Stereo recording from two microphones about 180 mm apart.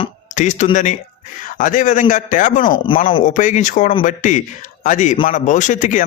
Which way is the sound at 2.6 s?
25° left (ahead or behind).